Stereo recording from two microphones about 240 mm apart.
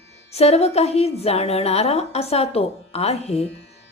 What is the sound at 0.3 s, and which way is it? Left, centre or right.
A woman's voice, left.